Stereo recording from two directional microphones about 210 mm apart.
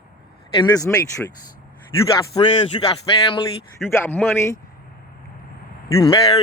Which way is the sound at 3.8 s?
10° left (ahead or behind).